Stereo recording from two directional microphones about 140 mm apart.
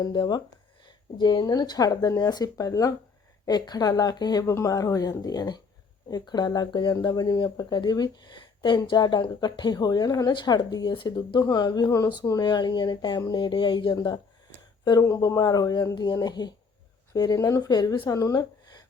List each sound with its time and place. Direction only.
0.0 s speech: 30° left (ahead or behind)